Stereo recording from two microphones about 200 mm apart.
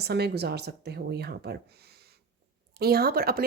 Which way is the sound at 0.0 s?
55° right (ahead or behind).